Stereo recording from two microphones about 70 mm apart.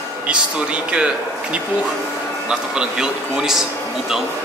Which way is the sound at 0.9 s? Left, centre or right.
Centre.